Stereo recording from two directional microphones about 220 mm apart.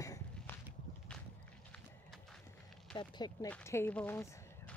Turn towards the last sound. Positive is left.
turn(degrees=10)  # may be behind; listen again after turning